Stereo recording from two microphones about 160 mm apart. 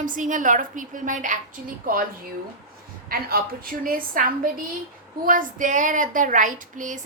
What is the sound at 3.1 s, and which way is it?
A woman's voice, 65° right (ahead or behind).